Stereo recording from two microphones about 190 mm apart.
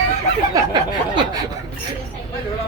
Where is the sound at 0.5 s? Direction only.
20° right (ahead or behind).